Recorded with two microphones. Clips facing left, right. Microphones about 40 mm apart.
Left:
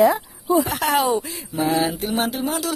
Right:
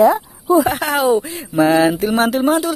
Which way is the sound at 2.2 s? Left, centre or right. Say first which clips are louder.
Right 8 dB; right.